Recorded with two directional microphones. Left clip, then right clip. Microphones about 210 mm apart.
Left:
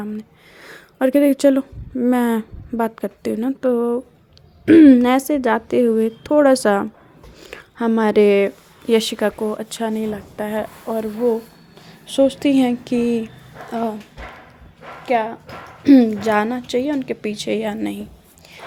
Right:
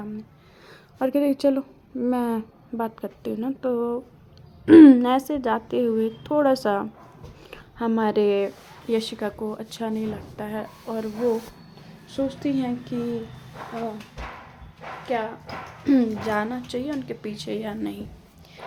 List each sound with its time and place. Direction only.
0.0 s speech: 40° left (ahead or behind)
12.1 s speech: 40° left (ahead or behind)
15.0 s speech: 35° left (ahead or behind)